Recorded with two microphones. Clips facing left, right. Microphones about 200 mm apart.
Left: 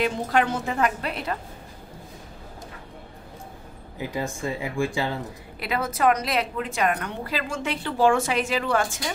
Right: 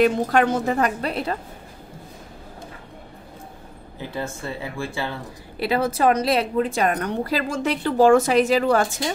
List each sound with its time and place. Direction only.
0.0 s a woman's voice: 45° right (ahead or behind)
4.0 s speech: 15° left (ahead or behind)
5.6 s a woman's voice: 30° right (ahead or behind)